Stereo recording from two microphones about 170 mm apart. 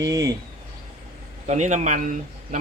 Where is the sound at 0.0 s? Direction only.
20° right (ahead or behind).